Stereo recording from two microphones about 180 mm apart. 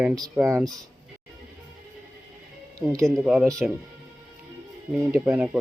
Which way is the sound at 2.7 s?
15° right (ahead or behind).